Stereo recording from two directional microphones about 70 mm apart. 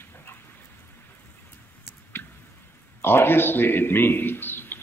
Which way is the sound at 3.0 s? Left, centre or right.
Left.